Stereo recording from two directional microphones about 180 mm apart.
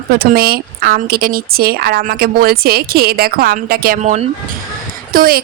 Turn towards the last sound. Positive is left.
turn(degrees=-55)  # may be behind; listen again after turning